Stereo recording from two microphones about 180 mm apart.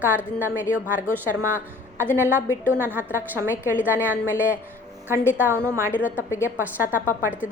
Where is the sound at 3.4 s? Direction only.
15° left (ahead or behind).